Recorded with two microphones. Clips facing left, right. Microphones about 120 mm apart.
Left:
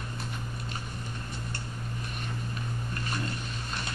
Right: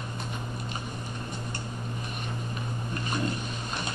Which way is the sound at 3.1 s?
15° right (ahead or behind).